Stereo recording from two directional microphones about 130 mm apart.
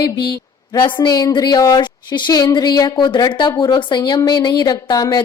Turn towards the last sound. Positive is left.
turn(degrees=35)  # may be behind; listen again after turning